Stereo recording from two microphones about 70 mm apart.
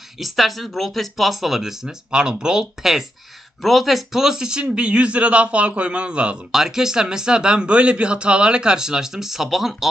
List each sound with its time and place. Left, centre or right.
0.2 s speech: centre